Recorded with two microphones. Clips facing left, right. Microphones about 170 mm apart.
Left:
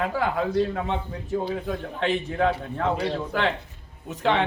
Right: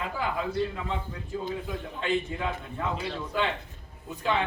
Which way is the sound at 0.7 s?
70° left (ahead or behind).